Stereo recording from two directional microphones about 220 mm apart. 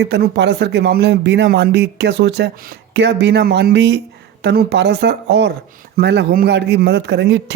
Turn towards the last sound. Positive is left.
turn(degrees=-50)  # may be behind; listen again after turning